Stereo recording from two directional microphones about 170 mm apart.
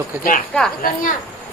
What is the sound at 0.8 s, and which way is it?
Speech, 55° left (ahead or behind).